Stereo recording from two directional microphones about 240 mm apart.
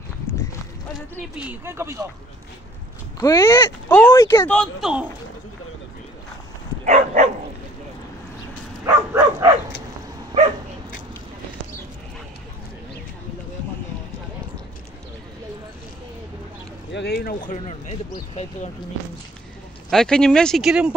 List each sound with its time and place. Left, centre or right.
0.3 s a sound: centre
1.3 s speech: centre
3.2 s speech: centre
6.8 s bow-wow: right
8.8 s bow-wow: centre
16.9 s speech: left
19.9 s speech: centre